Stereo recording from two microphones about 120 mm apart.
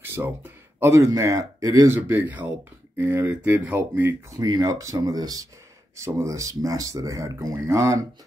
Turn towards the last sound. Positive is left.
turn(degrees=-25)  # may be behind; listen again after turning